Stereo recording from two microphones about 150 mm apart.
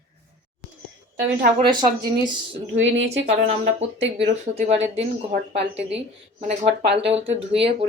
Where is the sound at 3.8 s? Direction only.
50° right (ahead or behind).